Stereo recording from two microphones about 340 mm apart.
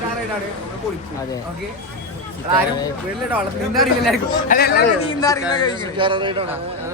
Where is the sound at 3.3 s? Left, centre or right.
Centre.